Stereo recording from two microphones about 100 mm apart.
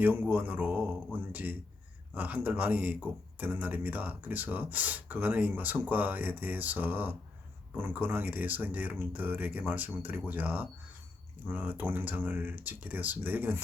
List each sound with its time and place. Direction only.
0.0 s a man's voice: 20° right (ahead or behind)